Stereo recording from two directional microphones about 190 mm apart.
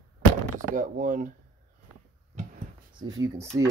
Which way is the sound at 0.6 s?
45° right (ahead or behind).